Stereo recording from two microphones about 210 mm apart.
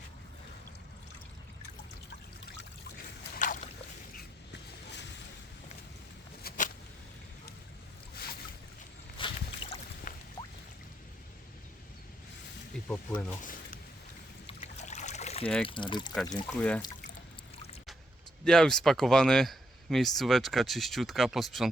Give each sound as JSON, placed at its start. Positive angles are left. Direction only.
{"t": 3.3, "sound": "boat", "side_deg": 40}
{"t": 6.5, "sound": "a sound", "side_deg": 45}
{"t": 9.2, "sound": "boat", "side_deg": 25}
{"t": 12.9, "sound": "speech", "side_deg": 5}
{"t": 14.4, "sound": "boat", "side_deg": 35}
{"t": 15.6, "sound": "speech", "side_deg": 25}
{"t": 16.5, "sound": "speech", "side_deg": 5}
{"t": 18.4, "sound": "speech", "side_deg": 5}